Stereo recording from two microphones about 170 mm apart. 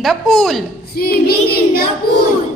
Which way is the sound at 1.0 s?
65° left (ahead or behind).